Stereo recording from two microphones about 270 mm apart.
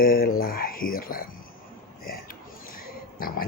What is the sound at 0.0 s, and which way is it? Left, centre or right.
Speech, left.